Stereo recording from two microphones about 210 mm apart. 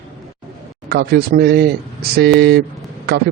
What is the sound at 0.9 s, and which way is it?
Speech, 50° right (ahead or behind).